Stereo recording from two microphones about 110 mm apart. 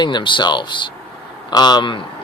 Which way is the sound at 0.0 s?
45° left (ahead or behind).